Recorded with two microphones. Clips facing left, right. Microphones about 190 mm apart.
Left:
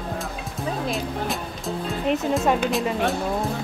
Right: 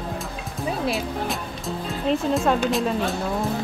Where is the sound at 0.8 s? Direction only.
Centre (ahead or behind).